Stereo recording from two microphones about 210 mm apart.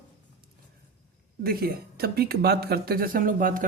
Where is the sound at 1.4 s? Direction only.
45° right (ahead or behind).